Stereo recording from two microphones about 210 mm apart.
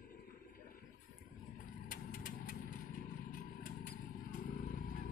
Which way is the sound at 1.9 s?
40° left (ahead or behind).